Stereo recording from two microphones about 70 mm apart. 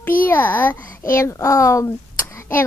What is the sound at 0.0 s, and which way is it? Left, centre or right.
Speech, left.